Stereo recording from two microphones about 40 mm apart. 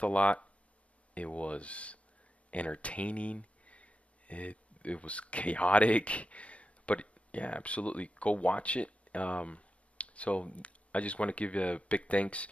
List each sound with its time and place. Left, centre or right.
0.0 s speech: left